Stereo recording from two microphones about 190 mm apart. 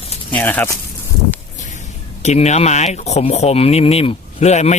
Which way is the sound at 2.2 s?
35° left (ahead or behind).